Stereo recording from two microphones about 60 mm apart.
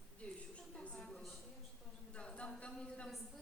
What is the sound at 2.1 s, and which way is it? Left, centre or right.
Speech, centre.